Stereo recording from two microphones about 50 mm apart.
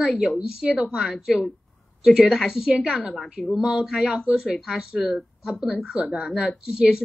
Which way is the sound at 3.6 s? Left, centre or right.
Centre.